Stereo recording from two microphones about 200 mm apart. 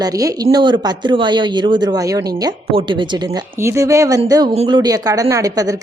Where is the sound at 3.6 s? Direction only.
15° right (ahead or behind).